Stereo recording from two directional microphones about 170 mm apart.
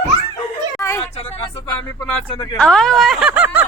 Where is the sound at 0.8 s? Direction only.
15° left (ahead or behind).